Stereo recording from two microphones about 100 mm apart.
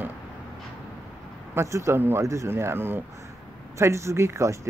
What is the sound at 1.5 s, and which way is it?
Speech, 30° right (ahead or behind).